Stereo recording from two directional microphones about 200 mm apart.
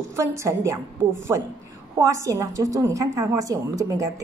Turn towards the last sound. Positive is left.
turn(degrees=-15)  # may be behind; listen again after turning